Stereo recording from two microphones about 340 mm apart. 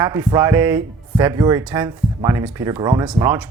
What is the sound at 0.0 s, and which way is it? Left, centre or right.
Speech, centre.